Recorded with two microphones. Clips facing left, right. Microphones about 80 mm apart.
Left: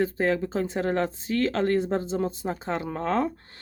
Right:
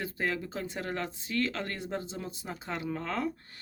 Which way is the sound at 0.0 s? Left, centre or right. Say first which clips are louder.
Left 9 dB; left.